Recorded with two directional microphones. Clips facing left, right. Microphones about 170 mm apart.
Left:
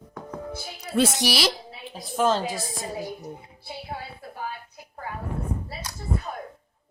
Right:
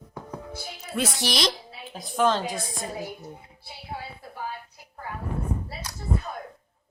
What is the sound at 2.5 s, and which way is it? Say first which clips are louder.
Speech: left 1 dB; centre (ahead or behind).